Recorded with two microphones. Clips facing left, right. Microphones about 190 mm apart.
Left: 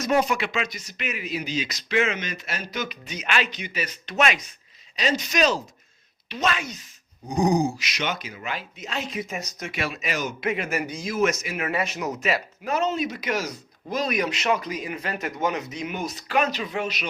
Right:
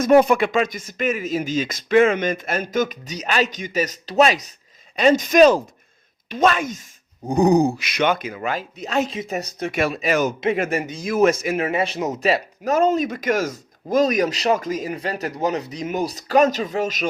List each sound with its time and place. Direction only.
0.0 s speech: 55° right (ahead or behind); by 4.5 s 35° right (ahead or behind)
4.9 s speech: 50° right (ahead or behind)
7.3 s speech: 60° right (ahead or behind)
8.5 s speech: 45° right (ahead or behind)
9.0 s speech: 30° right (ahead or behind)
9.7 s speech: 45° right (ahead or behind)
10.5 s speech: 35° right (ahead or behind)